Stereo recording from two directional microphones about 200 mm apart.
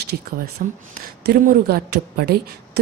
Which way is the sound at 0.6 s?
45° right (ahead or behind).